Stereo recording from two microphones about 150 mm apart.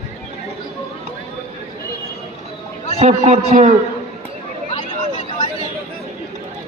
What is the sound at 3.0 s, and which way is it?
Speech, 50° right (ahead or behind).